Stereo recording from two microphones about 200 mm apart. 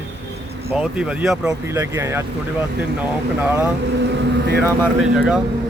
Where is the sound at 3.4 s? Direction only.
10° right (ahead or behind).